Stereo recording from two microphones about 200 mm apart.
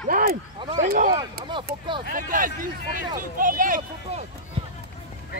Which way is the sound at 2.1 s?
45° right (ahead or behind).